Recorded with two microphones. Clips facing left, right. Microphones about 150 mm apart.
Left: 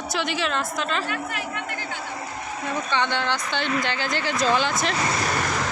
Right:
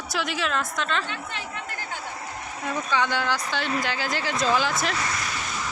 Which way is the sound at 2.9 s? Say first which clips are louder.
Even; 5° right (ahead or behind).